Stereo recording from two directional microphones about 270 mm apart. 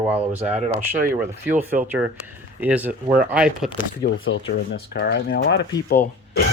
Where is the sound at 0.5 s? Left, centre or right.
Right.